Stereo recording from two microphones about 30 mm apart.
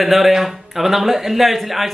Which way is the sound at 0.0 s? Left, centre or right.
Centre.